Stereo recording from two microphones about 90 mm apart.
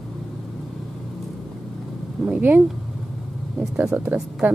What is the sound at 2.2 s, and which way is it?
Speech, 15° right (ahead or behind).